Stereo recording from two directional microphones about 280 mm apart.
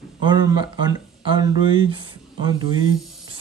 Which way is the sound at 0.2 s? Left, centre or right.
Centre.